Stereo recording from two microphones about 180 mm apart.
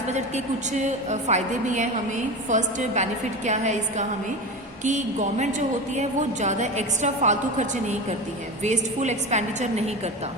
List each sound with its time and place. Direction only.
0.1 s a woman's voice: 40° right (ahead or behind)